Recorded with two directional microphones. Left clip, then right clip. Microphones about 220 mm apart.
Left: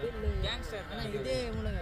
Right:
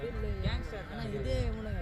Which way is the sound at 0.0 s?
40° left (ahead or behind).